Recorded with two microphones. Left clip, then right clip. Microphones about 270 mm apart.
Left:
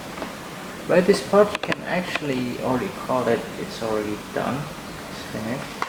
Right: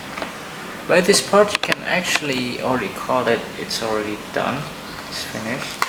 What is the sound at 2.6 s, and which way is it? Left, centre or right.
Speech, centre.